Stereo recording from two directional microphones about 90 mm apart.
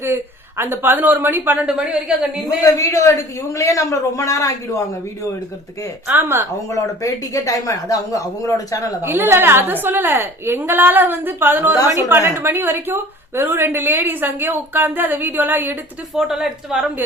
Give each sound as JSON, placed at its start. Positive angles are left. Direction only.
{"t": 0.0, "sound": "a woman's voice", "side_deg": -25}
{"t": 1.6, "sound": "a woman's voice", "side_deg": -10}
{"t": 2.6, "sound": "speech", "side_deg": 40}
{"t": 6.1, "sound": "a woman's voice", "side_deg": -25}
{"t": 6.7, "sound": "speech", "side_deg": 40}
{"t": 9.0, "sound": "a woman's voice", "side_deg": -25}
{"t": 16.1, "sound": "a woman's voice", "side_deg": -5}